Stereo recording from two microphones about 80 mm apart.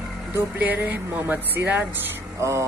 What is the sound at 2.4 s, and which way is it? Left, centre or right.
Speech, right.